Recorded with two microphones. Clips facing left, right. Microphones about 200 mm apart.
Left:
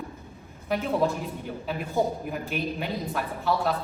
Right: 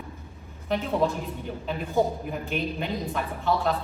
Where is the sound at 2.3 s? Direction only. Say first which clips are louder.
Right 1 dB; 5° left (ahead or behind).